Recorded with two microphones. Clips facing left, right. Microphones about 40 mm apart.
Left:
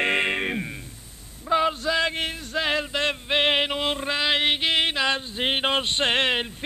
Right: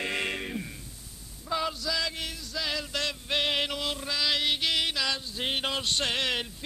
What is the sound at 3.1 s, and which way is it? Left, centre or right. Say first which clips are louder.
Music: left 7 dB; left.